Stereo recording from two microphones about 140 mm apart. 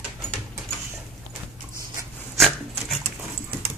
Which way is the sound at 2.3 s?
Centre (ahead or behind).